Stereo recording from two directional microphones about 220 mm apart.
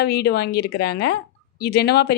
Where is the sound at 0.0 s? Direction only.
45° left (ahead or behind).